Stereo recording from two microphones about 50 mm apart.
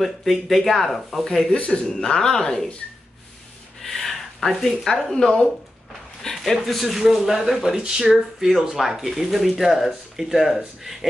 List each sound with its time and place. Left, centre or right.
0.0 s speech: centre
1.5 s a man's voice: centre
3.8 s speech: centre